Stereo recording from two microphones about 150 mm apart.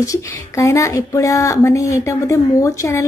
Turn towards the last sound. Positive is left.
turn(degrees=20)  # may be behind; listen again after turning